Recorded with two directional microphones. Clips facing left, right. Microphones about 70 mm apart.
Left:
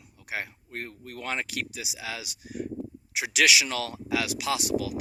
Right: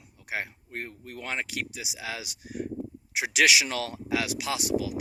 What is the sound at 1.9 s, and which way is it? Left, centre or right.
Speech, right.